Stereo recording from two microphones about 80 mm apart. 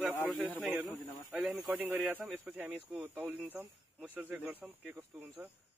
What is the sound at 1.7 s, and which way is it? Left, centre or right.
Speech, right.